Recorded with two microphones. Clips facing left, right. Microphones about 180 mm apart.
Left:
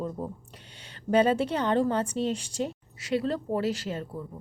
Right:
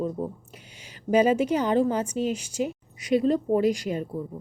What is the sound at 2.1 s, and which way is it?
Speech, 30° left (ahead or behind).